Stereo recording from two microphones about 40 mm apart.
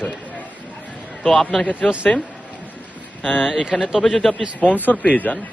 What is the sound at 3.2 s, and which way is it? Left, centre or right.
Speech, left.